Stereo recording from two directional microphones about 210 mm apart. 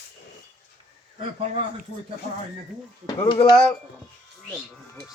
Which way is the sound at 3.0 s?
20° left (ahead or behind).